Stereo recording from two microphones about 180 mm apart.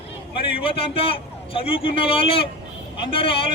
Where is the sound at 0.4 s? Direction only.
30° left (ahead or behind).